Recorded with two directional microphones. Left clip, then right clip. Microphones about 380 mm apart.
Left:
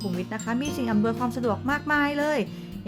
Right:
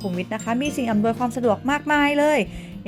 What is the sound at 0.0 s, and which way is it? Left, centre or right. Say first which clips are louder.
Speech: right 4 dB; centre.